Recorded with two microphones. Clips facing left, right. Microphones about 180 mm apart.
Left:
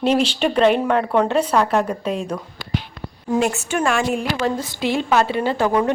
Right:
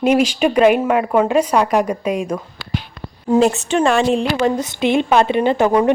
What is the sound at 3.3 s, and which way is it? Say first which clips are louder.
A woman's voice: right 6 dB; 30° right (ahead or behind).